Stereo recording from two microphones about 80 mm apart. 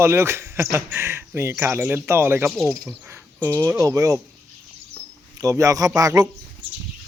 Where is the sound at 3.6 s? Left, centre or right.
Right.